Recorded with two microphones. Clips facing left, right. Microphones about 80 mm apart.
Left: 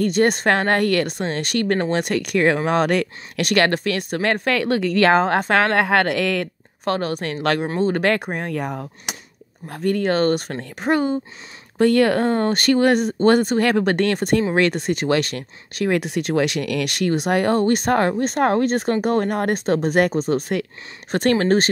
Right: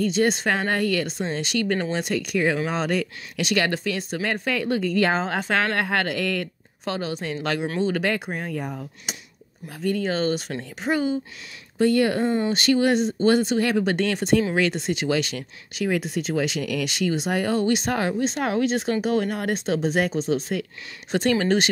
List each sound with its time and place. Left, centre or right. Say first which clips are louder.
0.0 s speech: left 4 dB; left
7.6 s speech: left 3 dB; left
8.0 s speech: left 5 dB; left
9.7 s speech: left 5 dB; left